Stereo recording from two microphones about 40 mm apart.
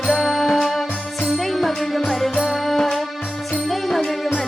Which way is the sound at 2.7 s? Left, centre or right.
Centre.